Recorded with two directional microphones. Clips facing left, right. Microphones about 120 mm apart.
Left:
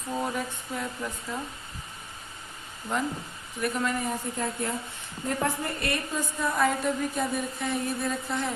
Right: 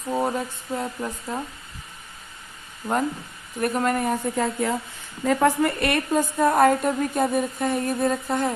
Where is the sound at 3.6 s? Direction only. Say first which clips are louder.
Right 6 dB; 50° right (ahead or behind).